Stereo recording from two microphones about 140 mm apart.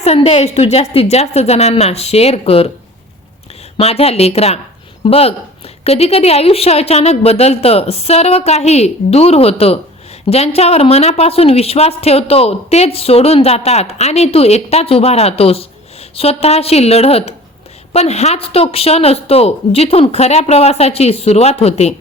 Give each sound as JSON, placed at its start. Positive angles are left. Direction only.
{"t": 0.0, "sound": "speech", "side_deg": 45}
{"t": 3.8, "sound": "speech", "side_deg": 45}